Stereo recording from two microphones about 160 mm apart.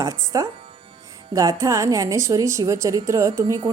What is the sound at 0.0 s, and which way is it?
A woman's voice, 20° right (ahead or behind).